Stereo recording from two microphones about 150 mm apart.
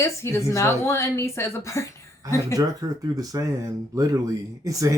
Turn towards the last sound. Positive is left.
turn(degrees=-25)  # may be behind; listen again after turning